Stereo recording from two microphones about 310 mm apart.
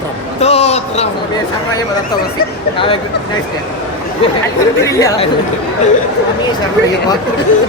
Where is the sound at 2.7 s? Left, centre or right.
Centre.